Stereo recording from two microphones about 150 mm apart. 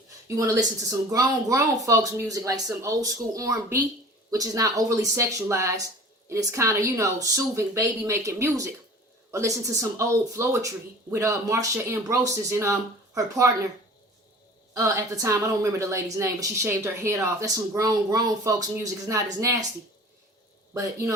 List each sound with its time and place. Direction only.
0.3 s speech: 20° right (ahead or behind)
14.7 s speech: 20° right (ahead or behind)